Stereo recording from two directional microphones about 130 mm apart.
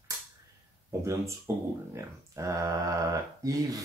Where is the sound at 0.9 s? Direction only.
20° right (ahead or behind).